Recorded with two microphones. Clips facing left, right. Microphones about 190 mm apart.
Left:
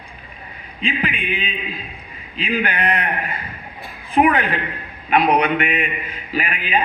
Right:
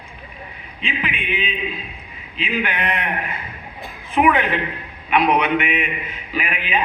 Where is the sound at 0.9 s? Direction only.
40° left (ahead or behind).